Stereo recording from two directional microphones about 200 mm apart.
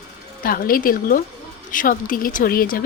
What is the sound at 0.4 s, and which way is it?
Speech, 45° left (ahead or behind).